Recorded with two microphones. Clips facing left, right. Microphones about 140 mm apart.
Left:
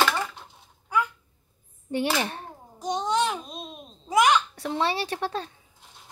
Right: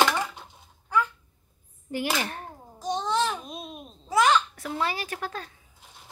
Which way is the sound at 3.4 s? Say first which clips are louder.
Right 1 dB; 5° right (ahead or behind).